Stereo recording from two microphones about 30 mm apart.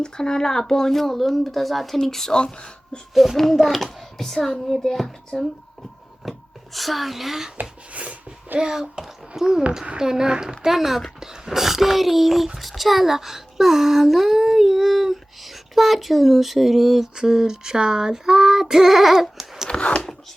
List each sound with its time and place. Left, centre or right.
0.0 s speech: left; by 2.0 s centre
2.0 s speech: centre
2.3 s speech: left
3.3 s a child's voice: centre
6.2 s a sound: centre
6.7 s speech: centre
7.6 s a sound: right
8.5 s a child's voice: right
10.7 s speech: centre
17.2 s speech: centre
19.7 s a sound: left